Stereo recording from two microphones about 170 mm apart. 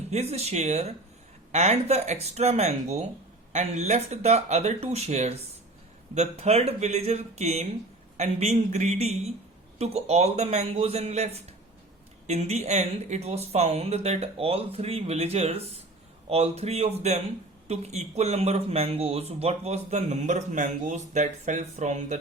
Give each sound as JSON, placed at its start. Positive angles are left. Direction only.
{"t": 0.1, "sound": "speech", "side_deg": -40}